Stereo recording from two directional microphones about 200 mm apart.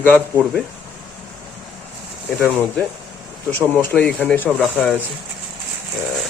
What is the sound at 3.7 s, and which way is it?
Speech, 5° left (ahead or behind).